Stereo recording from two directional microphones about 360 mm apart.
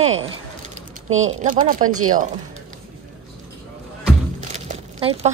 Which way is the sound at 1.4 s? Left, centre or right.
Right.